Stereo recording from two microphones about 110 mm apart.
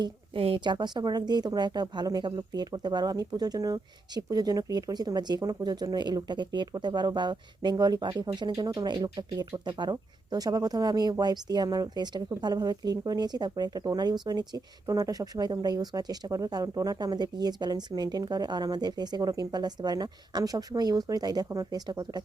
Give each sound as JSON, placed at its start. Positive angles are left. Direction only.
{"t": 0.0, "sound": "speech", "side_deg": -55}